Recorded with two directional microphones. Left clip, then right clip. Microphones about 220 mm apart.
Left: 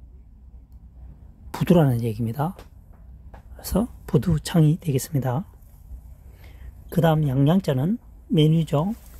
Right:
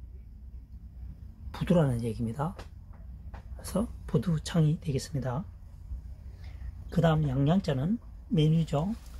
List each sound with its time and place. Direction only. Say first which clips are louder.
1.5 s speech: left 7 dB; 55° left (ahead or behind)
3.5 s speech: left 7 dB; 55° left (ahead or behind)
6.4 s speech: left 4 dB; 60° left (ahead or behind)